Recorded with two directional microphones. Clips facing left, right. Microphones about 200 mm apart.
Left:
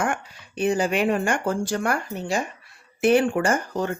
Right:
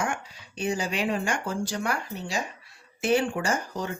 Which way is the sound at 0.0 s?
55° left (ahead or behind).